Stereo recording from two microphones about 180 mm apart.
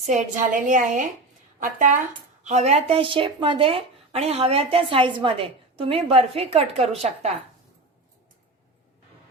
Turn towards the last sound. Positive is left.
turn(degrees=-35)  # may be behind; listen again after turning